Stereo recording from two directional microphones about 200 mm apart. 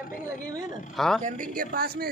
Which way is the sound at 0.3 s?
15° right (ahead or behind).